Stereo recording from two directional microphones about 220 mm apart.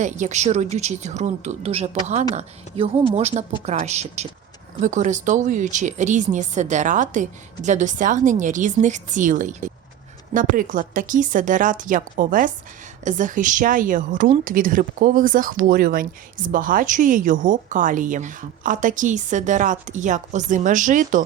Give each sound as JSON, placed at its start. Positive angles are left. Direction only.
{"t": 0.0, "sound": "a woman's voice", "side_deg": -30}